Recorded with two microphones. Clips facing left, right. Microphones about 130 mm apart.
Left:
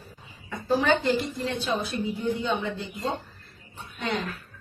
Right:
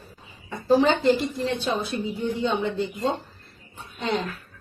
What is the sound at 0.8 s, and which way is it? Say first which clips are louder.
Speech: right 3 dB; 30° right (ahead or behind).